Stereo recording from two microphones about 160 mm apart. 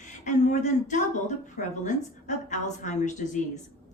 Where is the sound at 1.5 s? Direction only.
50° left (ahead or behind).